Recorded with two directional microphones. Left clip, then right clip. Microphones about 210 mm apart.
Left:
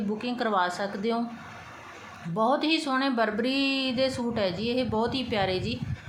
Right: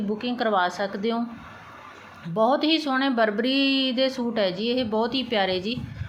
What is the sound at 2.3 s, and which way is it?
A woman's voice, 10° right (ahead or behind).